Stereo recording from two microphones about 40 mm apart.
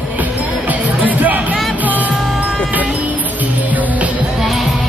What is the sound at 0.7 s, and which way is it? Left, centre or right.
Music, right.